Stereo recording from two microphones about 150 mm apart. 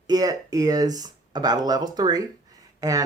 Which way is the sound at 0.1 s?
25° right (ahead or behind).